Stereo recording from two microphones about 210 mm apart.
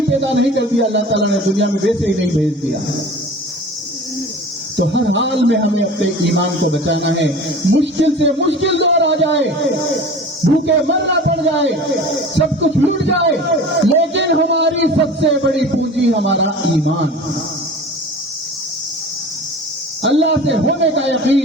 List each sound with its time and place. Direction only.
0.1 s speech: 60° right (ahead or behind)
4.8 s speech: 60° right (ahead or behind)
20.0 s speech: 60° right (ahead or behind)